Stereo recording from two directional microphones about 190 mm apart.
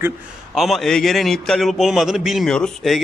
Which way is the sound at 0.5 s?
Centre (ahead or behind).